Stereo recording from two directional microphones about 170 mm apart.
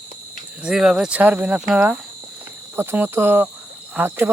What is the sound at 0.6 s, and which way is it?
Speech, 5° right (ahead or behind).